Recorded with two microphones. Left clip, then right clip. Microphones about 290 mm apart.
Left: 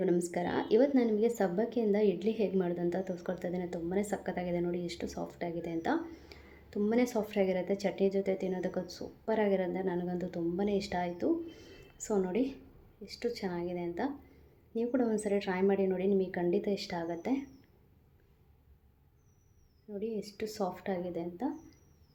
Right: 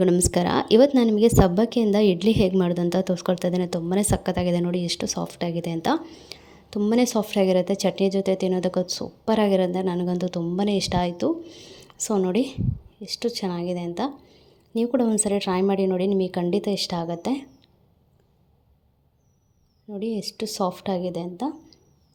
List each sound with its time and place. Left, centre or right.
0.0 s a woman's voice: right
19.9 s a woman's voice: right